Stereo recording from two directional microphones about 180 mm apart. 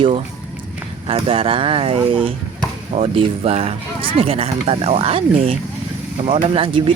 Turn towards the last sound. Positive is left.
turn(degrees=-30)  # may be behind; listen again after turning